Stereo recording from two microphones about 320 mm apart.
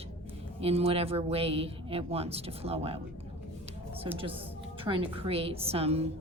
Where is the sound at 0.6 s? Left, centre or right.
Centre.